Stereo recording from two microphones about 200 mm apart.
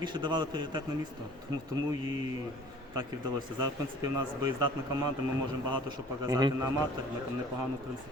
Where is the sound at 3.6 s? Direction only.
20° right (ahead or behind).